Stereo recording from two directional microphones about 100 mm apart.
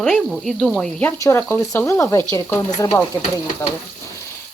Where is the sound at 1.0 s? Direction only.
30° left (ahead or behind).